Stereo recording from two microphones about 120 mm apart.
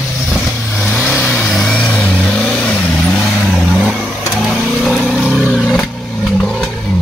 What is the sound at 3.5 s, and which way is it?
Vehicle, 5° right (ahead or behind).